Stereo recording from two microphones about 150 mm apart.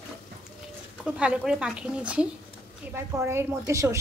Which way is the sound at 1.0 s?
5° right (ahead or behind).